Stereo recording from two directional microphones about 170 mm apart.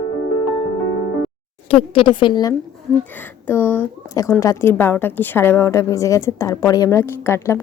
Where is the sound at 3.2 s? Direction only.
10° left (ahead or behind).